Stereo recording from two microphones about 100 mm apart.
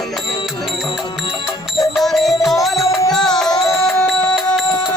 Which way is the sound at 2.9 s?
35° left (ahead or behind).